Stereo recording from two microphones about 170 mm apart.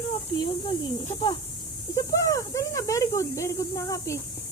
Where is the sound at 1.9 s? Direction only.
20° left (ahead or behind).